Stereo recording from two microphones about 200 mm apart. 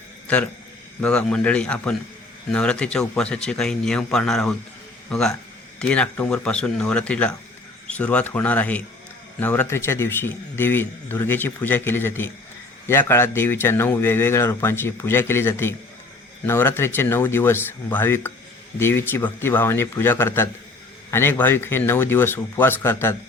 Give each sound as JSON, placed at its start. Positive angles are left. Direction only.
{"t": 0.3, "sound": "a man's voice", "side_deg": 5}